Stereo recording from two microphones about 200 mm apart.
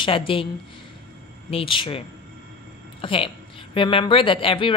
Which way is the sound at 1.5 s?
25° left (ahead or behind).